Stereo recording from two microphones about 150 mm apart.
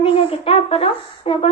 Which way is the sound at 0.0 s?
40° left (ahead or behind).